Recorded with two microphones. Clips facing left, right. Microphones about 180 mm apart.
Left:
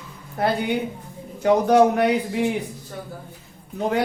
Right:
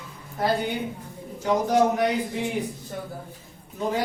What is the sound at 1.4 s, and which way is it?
Speech, 60° left (ahead or behind).